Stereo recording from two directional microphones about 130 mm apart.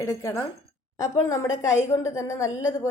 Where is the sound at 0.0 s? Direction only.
25° left (ahead or behind).